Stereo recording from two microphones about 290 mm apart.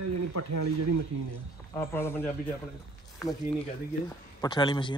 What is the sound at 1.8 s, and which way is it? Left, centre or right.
Speech, centre.